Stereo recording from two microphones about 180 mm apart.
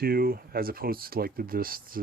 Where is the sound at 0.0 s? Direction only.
55° right (ahead or behind).